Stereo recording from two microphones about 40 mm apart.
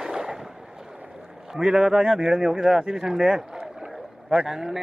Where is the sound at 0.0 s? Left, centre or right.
Centre.